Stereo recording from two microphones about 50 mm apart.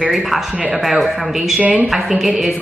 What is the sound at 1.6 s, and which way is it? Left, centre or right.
Speech, right.